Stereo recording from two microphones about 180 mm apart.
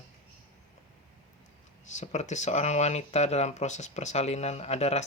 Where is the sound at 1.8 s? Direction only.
40° left (ahead or behind).